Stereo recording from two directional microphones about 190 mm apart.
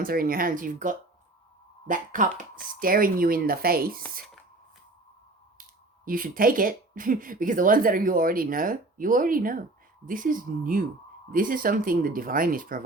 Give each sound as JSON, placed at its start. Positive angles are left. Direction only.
{"t": 0.0, "sound": "speech", "side_deg": -50}
{"t": 6.1, "sound": "speech", "side_deg": -50}